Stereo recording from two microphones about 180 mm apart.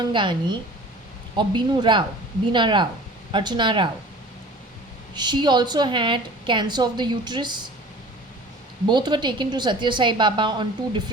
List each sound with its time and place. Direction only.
0.0 s a woman's voice: 25° right (ahead or behind)
5.1 s a woman's voice: 25° right (ahead or behind)
8.9 s a woman's voice: 25° right (ahead or behind)